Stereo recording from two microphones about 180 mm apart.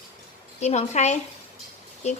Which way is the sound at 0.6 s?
40° left (ahead or behind).